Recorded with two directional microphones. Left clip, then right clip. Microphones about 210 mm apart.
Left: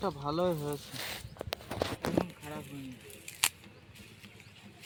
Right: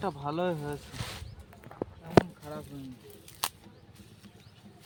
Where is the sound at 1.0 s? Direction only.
45° left (ahead or behind).